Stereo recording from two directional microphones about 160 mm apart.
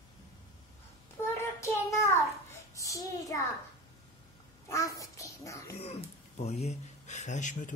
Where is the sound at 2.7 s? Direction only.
20° left (ahead or behind).